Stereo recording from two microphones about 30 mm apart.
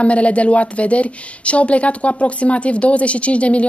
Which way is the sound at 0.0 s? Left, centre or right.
Left.